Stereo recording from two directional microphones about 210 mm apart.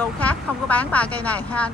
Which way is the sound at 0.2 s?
5° left (ahead or behind).